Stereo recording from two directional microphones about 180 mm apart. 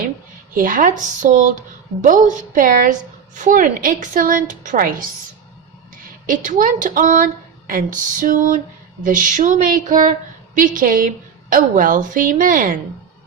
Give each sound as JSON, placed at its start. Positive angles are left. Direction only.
{"t": 0.5, "sound": "a woman's voice", "side_deg": -50}
{"t": 6.2, "sound": "a woman's voice", "side_deg": -50}